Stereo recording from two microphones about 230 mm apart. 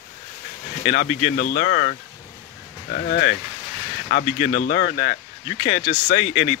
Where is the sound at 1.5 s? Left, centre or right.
Left.